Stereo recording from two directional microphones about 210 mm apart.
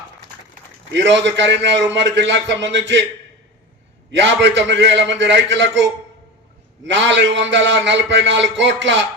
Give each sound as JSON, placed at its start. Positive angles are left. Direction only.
{"t": 0.9, "sound": "a man's voice", "side_deg": -60}
{"t": 4.2, "sound": "a man's voice", "side_deg": -60}
{"t": 6.8, "sound": "a man's voice", "side_deg": -60}